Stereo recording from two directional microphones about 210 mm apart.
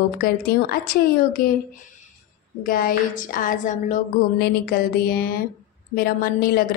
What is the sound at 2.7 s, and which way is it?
A woman's voice, 40° left (ahead or behind).